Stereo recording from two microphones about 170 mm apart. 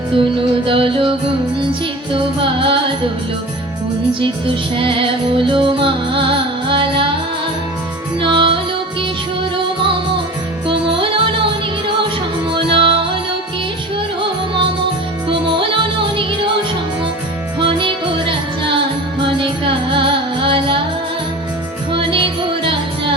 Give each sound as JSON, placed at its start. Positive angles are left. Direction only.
{"t": 0.2, "sound": "music", "side_deg": -30}
{"t": 2.1, "sound": "music", "side_deg": -30}
{"t": 4.8, "sound": "music", "side_deg": -30}
{"t": 8.2, "sound": "music", "side_deg": -30}
{"t": 12.7, "sound": "music", "side_deg": -30}
{"t": 15.3, "sound": "music", "side_deg": -30}
{"t": 17.6, "sound": "music", "side_deg": -30}
{"t": 21.9, "sound": "music", "side_deg": -30}